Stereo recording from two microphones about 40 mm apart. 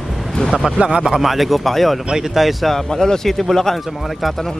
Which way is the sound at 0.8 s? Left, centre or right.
Right.